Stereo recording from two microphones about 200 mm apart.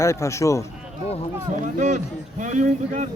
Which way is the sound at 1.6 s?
35° right (ahead or behind).